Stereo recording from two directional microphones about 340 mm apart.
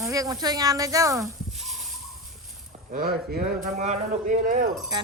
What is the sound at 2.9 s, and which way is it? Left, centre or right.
Speech, right.